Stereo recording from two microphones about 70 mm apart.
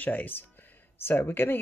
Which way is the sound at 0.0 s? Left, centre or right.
Left.